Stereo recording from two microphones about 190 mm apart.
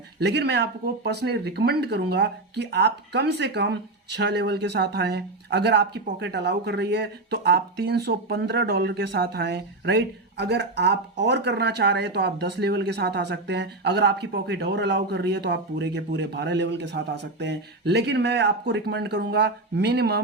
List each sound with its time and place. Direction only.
0.2 s speech: 60° right (ahead or behind)